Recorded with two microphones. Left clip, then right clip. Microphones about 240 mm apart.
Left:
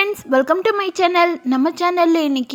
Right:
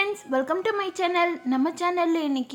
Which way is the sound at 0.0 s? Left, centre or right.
Left.